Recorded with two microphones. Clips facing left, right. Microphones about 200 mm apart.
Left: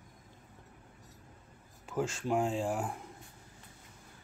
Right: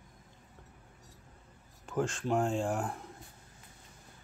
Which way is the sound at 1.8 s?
5° left (ahead or behind).